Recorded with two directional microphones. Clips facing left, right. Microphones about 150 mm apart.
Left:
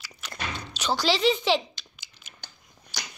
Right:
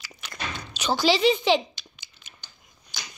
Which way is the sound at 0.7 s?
Centre (ahead or behind).